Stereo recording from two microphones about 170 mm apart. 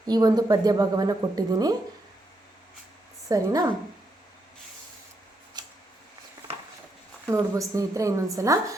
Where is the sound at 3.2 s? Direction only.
20° right (ahead or behind).